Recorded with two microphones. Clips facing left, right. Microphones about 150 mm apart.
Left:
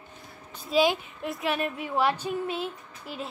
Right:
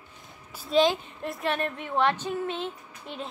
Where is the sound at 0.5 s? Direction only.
Centre (ahead or behind).